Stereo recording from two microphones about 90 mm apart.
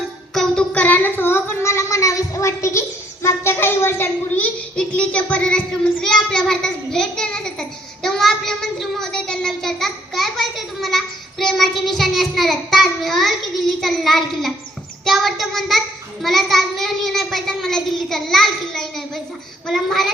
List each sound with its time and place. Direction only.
0.3 s child singing: 10° left (ahead or behind); by 2.8 s 30° left (ahead or behind)
3.2 s a child's voice: 30° left (ahead or behind); by 14.5 s centre (ahead or behind)
15.0 s child singing: centre (ahead or behind)